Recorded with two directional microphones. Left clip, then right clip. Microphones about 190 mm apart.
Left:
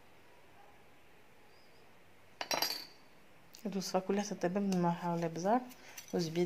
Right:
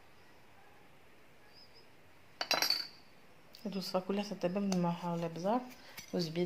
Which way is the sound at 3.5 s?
25° left (ahead or behind).